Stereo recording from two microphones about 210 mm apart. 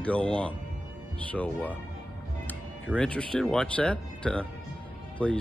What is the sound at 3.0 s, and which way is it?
Speech, 5° left (ahead or behind).